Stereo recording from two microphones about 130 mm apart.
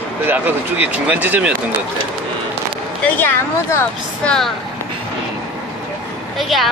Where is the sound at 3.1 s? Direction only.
15° left (ahead or behind).